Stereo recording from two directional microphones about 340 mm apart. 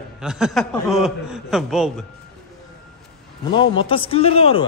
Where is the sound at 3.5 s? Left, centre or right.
Centre.